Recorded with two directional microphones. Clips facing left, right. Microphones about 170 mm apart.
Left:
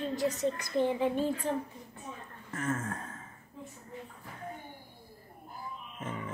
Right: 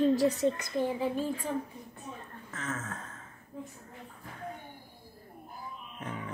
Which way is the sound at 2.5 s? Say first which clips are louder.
Left 4 dB; 10° left (ahead or behind).